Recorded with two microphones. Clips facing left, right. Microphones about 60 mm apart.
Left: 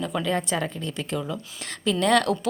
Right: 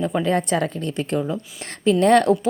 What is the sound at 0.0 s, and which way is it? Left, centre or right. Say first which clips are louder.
Speech: right 5 dB; right.